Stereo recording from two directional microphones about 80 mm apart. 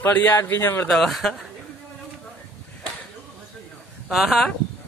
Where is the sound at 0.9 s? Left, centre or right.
Centre.